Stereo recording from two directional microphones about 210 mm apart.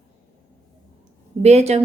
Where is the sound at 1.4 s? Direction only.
30° right (ahead or behind).